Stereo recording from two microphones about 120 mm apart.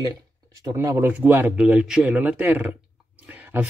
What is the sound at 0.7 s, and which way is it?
Speech, 25° right (ahead or behind).